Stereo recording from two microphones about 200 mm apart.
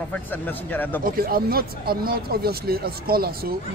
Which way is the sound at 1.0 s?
45° right (ahead or behind).